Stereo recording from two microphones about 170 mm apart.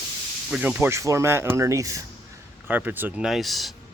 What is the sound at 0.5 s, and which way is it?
Speech, 5° right (ahead or behind).